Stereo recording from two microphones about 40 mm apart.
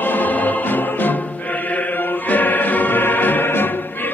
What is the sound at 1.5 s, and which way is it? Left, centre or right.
Chant, left.